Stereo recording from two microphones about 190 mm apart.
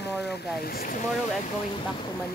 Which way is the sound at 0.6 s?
50° left (ahead or behind).